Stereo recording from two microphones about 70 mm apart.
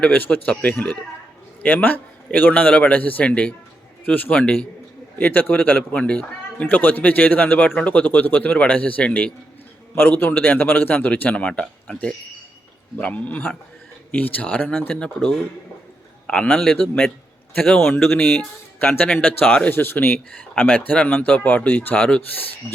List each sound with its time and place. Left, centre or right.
0.2 s speech: left
9.9 s speech: left
14.9 s a man's voice: centre
19.2 s speech: left